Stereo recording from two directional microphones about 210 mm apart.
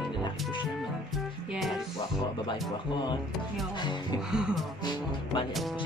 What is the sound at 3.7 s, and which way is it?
Speech, 20° left (ahead or behind).